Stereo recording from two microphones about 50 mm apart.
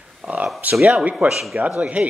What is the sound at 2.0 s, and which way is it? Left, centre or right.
Speech, right.